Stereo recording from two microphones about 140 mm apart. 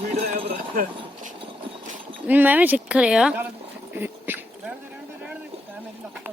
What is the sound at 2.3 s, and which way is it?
Speech, 10° right (ahead or behind).